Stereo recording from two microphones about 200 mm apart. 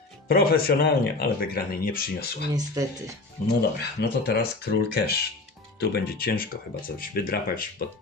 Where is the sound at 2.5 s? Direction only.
15° right (ahead or behind).